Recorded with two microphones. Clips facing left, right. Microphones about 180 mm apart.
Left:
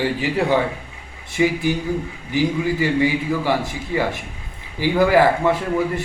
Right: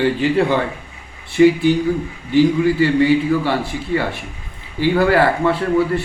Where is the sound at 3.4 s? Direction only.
20° left (ahead or behind).